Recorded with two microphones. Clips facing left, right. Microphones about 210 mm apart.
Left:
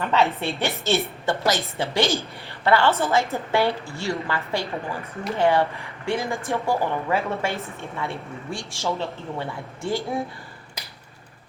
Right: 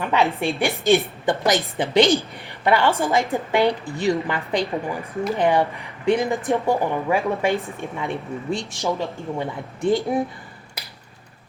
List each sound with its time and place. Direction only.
0.0 s a woman's voice: 10° right (ahead or behind)